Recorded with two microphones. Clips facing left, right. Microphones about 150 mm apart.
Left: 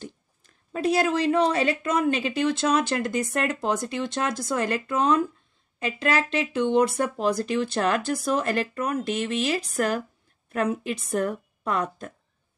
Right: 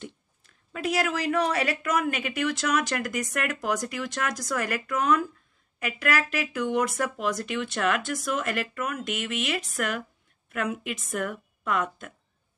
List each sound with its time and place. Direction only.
0.7 s a woman's voice: 30° left (ahead or behind)